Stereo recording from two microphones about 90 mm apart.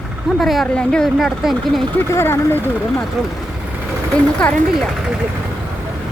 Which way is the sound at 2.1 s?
25° left (ahead or behind).